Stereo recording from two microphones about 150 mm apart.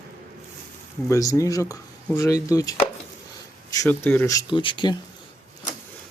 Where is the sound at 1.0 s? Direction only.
20° left (ahead or behind).